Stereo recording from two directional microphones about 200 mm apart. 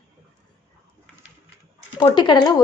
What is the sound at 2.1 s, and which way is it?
Speech, 20° left (ahead or behind).